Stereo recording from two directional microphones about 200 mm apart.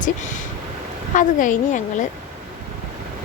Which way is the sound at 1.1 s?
40° left (ahead or behind).